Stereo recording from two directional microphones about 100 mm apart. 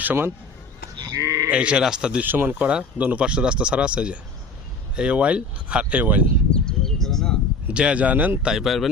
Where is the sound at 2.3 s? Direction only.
20° right (ahead or behind).